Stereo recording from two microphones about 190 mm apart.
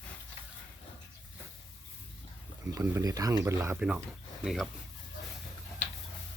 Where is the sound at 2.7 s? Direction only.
15° right (ahead or behind).